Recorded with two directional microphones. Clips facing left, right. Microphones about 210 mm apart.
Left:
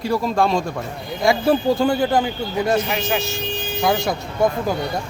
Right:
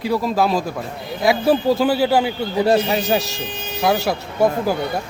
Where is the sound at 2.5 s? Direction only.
35° right (ahead or behind).